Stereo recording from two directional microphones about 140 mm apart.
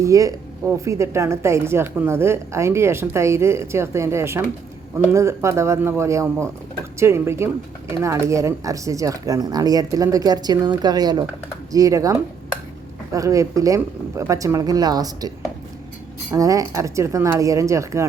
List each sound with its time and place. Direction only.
0.0 s speech: 25° right (ahead or behind)
16.3 s speech: 25° right (ahead or behind)